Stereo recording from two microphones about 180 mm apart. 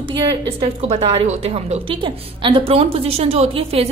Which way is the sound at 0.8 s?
35° right (ahead or behind).